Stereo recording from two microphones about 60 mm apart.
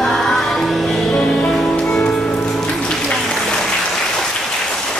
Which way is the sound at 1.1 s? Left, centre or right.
Centre.